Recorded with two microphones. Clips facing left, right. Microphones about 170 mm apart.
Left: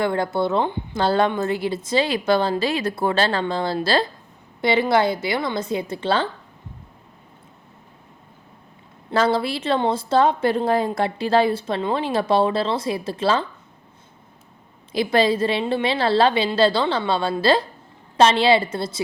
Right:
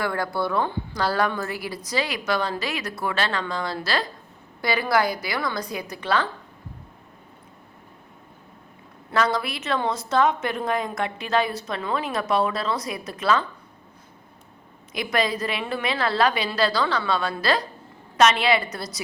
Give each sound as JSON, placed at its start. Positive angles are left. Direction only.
{"t": 0.0, "sound": "a woman's voice", "side_deg": 25}
{"t": 9.1, "sound": "a woman's voice", "side_deg": 30}
{"t": 14.9, "sound": "a woman's voice", "side_deg": 30}